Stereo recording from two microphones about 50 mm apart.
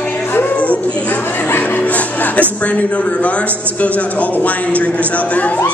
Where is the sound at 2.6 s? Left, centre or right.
Left.